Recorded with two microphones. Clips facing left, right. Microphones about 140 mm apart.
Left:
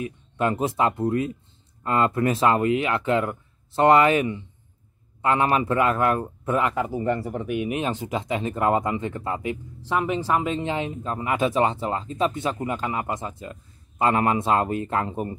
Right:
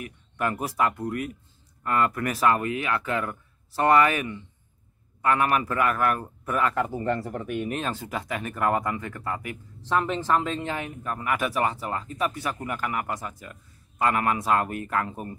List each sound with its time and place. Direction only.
0.0 s speech: 25° left (ahead or behind)
6.7 s speech: 10° left (ahead or behind)
9.8 s speech: 10° left (ahead or behind)